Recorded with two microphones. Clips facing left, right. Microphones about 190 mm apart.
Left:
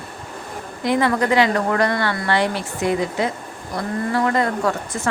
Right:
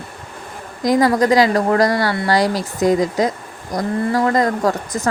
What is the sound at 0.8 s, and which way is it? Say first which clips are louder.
Speech: right 4 dB; 40° right (ahead or behind).